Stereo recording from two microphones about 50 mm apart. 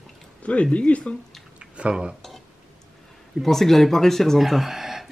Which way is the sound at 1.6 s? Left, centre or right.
Right.